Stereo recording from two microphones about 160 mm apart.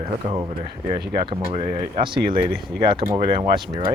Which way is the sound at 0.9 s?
85° right.